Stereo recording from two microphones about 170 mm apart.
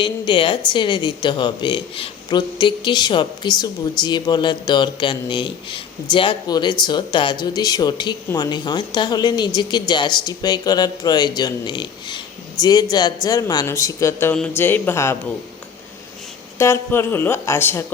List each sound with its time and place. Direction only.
0.0 s a woman's voice: 30° left (ahead or behind); by 15.2 s 15° left (ahead or behind)
16.6 s speech: 15° left (ahead or behind)